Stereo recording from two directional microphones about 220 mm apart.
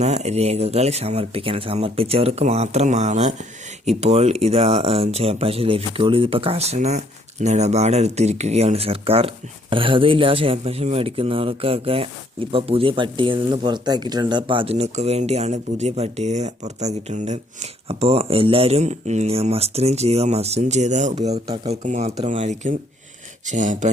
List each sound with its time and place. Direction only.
0.0 s speech: 30° right (ahead or behind)
21.3 s speech: 20° right (ahead or behind)